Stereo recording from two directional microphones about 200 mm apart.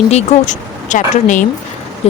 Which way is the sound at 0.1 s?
35° left (ahead or behind).